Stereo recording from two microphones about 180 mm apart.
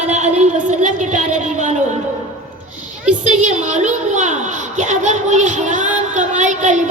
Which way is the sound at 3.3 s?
40° right (ahead or behind).